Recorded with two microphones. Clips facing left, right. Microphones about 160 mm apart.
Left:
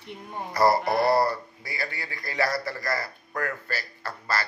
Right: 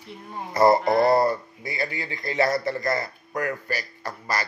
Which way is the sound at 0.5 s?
20° right (ahead or behind).